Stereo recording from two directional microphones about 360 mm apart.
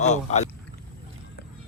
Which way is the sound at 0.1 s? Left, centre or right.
Centre.